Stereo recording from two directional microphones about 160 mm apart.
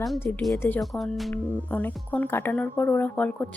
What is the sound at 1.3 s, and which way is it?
Speech, 10° left (ahead or behind).